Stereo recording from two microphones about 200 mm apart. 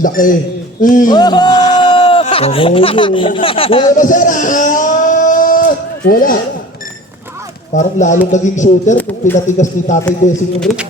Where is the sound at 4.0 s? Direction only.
40° left (ahead or behind).